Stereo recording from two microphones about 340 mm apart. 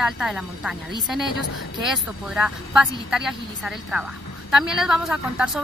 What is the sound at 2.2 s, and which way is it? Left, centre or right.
A woman's voice, centre.